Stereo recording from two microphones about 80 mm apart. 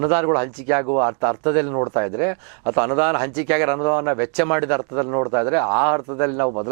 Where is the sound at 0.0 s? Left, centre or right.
Centre.